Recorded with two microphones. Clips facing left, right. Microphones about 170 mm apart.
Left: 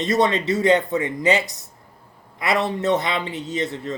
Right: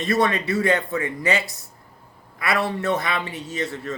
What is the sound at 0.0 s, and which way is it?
A man's voice, 20° left (ahead or behind).